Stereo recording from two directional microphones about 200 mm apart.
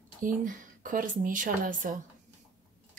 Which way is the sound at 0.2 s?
40° right (ahead or behind).